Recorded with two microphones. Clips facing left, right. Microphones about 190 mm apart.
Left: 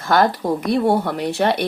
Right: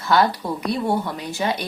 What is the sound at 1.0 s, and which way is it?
Speech, 65° left (ahead or behind).